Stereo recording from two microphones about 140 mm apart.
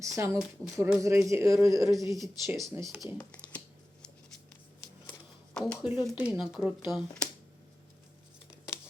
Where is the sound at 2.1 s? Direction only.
Centre (ahead or behind).